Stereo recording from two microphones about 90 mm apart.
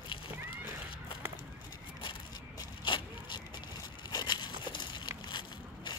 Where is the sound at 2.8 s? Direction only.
60° left (ahead or behind).